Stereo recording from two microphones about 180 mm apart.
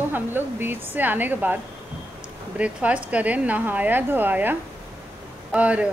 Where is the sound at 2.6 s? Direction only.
5° right (ahead or behind).